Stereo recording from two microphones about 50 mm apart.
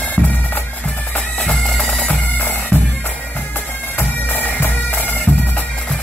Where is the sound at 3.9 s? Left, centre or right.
Left.